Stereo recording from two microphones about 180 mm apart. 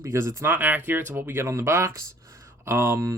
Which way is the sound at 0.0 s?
15° right (ahead or behind).